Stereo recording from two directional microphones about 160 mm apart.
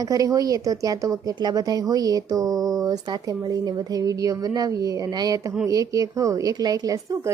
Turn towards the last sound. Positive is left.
turn(degrees=-20)  # may be behind; listen again after turning